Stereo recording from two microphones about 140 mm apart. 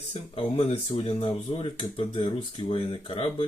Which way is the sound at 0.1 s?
45° left (ahead or behind).